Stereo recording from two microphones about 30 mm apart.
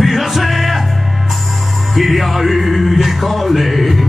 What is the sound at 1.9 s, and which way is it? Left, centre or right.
Music, centre.